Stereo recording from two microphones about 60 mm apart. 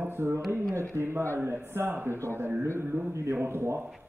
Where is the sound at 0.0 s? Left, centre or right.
Right.